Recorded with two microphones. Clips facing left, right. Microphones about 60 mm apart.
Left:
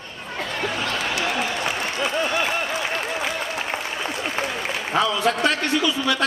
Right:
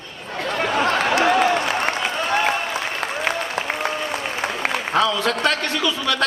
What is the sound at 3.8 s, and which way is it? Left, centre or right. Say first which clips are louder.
Applause: right 3 dB; right.